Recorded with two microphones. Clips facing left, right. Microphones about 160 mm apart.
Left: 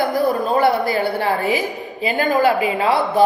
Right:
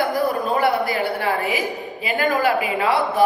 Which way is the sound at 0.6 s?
30° left (ahead or behind).